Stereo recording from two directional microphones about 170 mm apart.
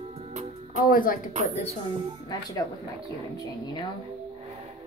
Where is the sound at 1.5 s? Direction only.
40° left (ahead or behind).